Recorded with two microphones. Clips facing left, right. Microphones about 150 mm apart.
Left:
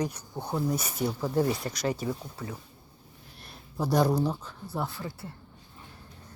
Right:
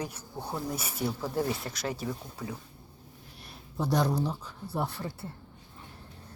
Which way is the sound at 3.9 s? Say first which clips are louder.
Left 4 dB; 5° left (ahead or behind).